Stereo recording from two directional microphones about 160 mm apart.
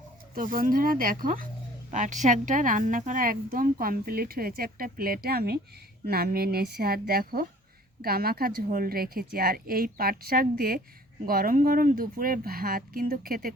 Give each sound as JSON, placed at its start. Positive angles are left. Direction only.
{"t": 0.3, "sound": "a woman's voice", "side_deg": -60}